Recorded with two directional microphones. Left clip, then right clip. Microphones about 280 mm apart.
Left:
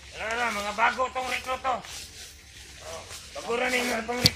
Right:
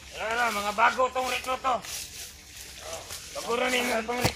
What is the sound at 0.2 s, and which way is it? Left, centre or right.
Speech, right.